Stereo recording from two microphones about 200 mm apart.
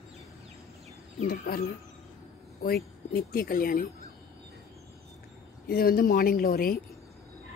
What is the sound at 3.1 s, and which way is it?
Speech, 45° left (ahead or behind).